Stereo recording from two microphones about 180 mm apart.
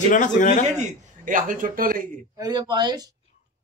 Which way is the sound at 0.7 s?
45° right (ahead or behind).